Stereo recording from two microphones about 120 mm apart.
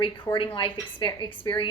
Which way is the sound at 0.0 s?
40° left (ahead or behind).